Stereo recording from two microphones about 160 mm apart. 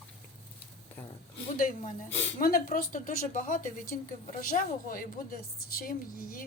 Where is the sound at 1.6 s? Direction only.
60° left (ahead or behind).